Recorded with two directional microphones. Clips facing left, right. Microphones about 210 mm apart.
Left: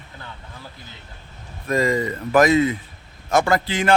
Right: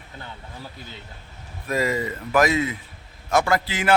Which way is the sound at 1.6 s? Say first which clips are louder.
Left 4 dB; 5° right (ahead or behind).